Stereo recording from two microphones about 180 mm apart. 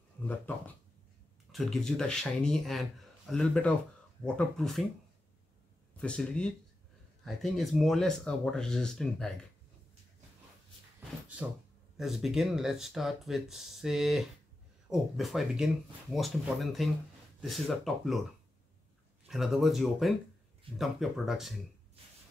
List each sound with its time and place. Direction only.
1.5 s speech: centre (ahead or behind)
5.9 s speech: 5° left (ahead or behind)
12.0 s speech: centre (ahead or behind)
19.2 s speech: centre (ahead or behind)